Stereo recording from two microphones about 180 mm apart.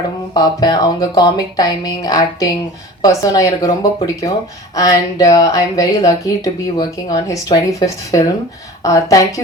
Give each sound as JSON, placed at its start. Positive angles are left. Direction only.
{"t": 0.3, "sound": "speech", "side_deg": 20}